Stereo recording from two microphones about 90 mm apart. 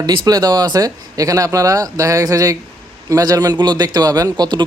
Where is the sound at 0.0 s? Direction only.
45° right (ahead or behind).